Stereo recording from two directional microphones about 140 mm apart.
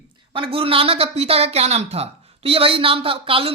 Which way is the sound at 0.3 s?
40° right (ahead or behind).